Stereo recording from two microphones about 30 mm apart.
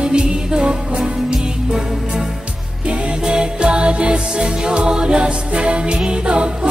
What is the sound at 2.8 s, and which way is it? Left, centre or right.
Music, right.